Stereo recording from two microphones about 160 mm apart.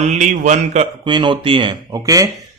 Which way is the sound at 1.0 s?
30° right (ahead or behind).